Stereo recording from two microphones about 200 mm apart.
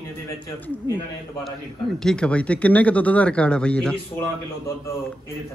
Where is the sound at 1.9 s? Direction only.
5° left (ahead or behind).